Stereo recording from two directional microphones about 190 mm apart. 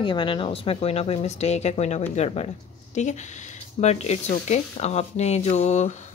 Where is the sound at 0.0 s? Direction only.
25° left (ahead or behind).